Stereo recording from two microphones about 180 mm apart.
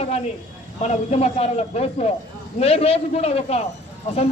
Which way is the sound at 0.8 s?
40° left (ahead or behind).